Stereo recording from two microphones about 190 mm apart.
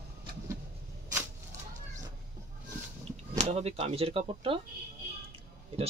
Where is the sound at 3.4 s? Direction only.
35° right (ahead or behind).